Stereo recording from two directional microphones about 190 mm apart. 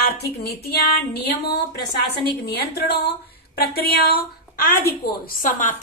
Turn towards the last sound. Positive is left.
turn(degrees=45)  # may be behind; listen again after turning